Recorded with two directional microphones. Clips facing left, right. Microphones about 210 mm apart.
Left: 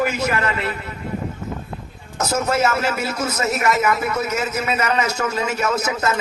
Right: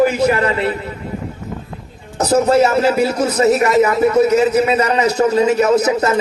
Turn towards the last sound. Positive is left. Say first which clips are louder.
# right 8 dB
turn(degrees=-35)  # may be behind; listen again after turning